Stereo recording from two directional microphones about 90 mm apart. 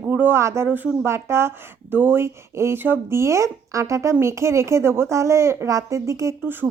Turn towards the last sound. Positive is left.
turn(degrees=-35)  # may be behind; listen again after turning